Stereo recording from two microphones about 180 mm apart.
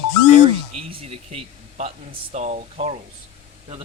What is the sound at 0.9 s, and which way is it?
Speech, 30° right (ahead or behind).